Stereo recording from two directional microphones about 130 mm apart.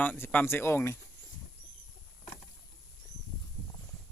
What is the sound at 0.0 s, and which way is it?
Speech, 15° left (ahead or behind).